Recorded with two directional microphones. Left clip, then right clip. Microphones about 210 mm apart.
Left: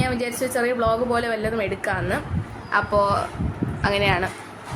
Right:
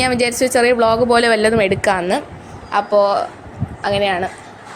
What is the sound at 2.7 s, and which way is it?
A woman's voice, 20° right (ahead or behind).